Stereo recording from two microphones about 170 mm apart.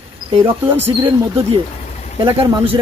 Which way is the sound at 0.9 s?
35° right (ahead or behind).